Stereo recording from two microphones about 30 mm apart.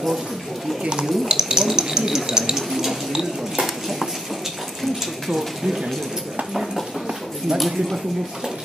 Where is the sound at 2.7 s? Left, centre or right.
Centre.